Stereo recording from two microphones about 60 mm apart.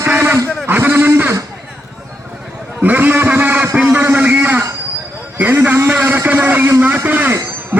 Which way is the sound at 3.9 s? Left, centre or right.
Right.